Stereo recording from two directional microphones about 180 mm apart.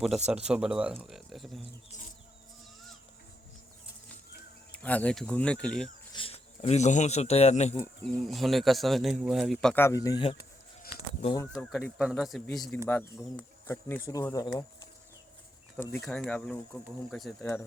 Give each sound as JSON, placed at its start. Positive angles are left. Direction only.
{"t": 0.3, "sound": "speech", "side_deg": -5}
{"t": 4.7, "sound": "speech", "side_deg": 10}
{"t": 6.1, "sound": "speech", "side_deg": 35}
{"t": 8.0, "sound": "speech", "side_deg": 0}
{"t": 9.8, "sound": "speech", "side_deg": 20}
{"t": 11.5, "sound": "speech", "side_deg": 0}
{"t": 13.7, "sound": "speech", "side_deg": 15}
{"t": 15.8, "sound": "speech", "side_deg": 10}
{"t": 17.4, "sound": "speech", "side_deg": 15}